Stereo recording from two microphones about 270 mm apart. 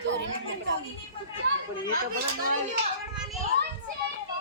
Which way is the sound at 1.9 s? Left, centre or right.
Right.